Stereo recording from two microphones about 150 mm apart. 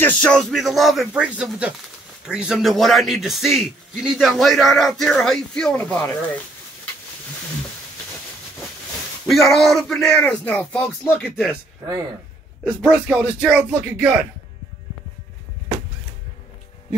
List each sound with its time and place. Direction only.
0.0 s a man's voice: 5° left (ahead or behind)
9.3 s a man's voice: centre (ahead or behind)
12.6 s speech: 5° right (ahead or behind)